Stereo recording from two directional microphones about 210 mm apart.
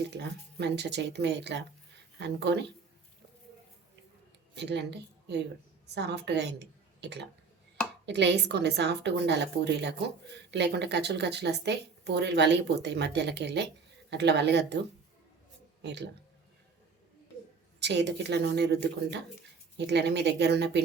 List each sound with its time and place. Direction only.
0.1 s speech: 50° right (ahead or behind)
4.5 s a woman's voice: 55° right (ahead or behind)
15.8 s speech: 55° right (ahead or behind)
17.7 s speech: 55° right (ahead or behind)